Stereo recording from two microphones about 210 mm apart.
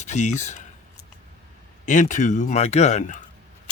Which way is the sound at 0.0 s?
35° left (ahead or behind).